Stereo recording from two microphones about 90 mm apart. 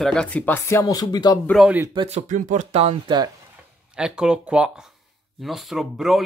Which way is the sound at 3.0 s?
50° right (ahead or behind).